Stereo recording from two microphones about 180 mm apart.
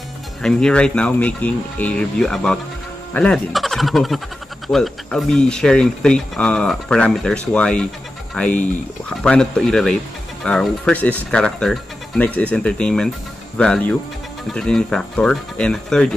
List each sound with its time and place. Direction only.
0.4 s speech: 5° left (ahead or behind)
9.1 s speech: 5° left (ahead or behind)